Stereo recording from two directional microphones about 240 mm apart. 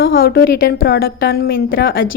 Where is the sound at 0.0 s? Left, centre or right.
Left.